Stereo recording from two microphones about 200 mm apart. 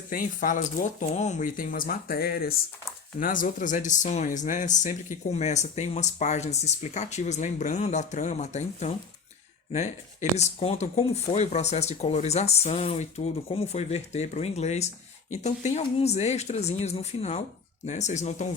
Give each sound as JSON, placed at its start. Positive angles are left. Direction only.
{"t": 0.1, "sound": "speech", "side_deg": 45}